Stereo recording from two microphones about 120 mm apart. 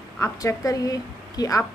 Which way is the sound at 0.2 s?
25° left (ahead or behind).